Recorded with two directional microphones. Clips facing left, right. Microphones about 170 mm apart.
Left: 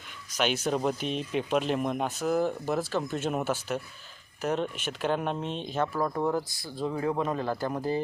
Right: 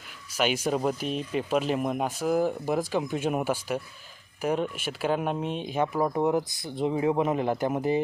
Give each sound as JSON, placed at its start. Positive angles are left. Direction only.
{"t": 0.3, "sound": "speech", "side_deg": -10}